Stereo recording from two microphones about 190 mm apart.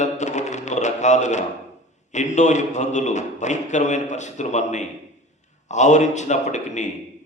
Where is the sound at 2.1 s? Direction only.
40° left (ahead or behind).